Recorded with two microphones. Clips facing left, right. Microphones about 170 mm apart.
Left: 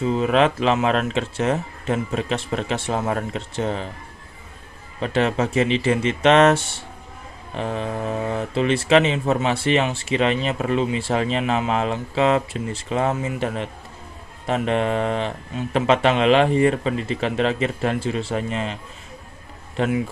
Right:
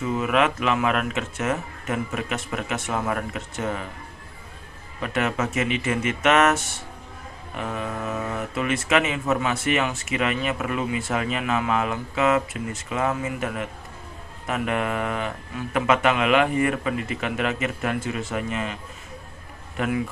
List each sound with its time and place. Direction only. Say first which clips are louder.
0.0 s speech: left 4 dB; 30° left (ahead or behind)
4.9 s speech: left 4 dB; 30° left (ahead or behind)